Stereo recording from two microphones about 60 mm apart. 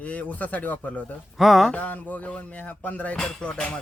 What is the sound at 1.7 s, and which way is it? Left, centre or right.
Speech, left.